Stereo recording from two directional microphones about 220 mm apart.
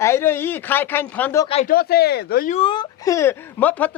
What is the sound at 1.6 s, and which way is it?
Speech, 45° left (ahead or behind).